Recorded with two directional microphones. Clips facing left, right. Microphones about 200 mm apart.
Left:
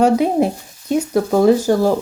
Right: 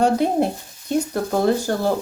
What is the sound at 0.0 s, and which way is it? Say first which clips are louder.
Speech: left 4 dB; 10° left (ahead or behind).